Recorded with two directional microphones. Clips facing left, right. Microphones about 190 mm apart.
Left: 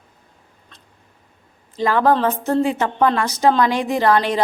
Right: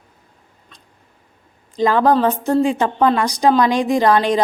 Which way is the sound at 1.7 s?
15° right (ahead or behind).